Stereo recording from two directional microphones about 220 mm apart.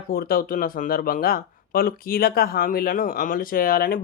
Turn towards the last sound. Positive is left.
turn(degrees=40)  # may be behind; listen again after turning